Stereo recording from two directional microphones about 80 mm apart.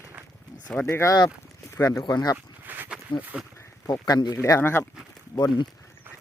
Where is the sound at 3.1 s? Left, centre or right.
Left.